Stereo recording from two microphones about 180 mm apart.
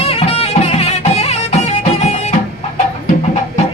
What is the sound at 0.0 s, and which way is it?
Music, 35° left (ahead or behind).